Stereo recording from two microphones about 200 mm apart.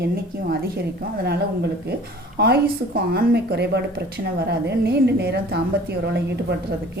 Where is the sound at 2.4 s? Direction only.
50° right (ahead or behind).